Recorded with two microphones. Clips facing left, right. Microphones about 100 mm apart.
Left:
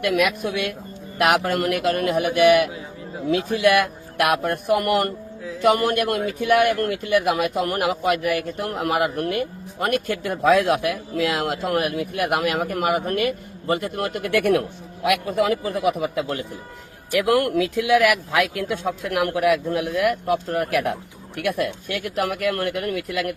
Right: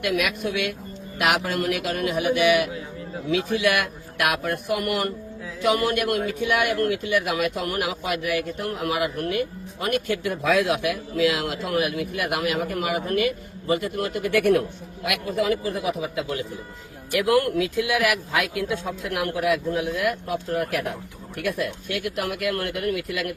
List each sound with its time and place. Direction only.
0.0 s a man's voice: 45° left (ahead or behind)